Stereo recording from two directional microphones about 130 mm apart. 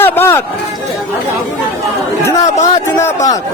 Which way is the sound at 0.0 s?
15° left (ahead or behind).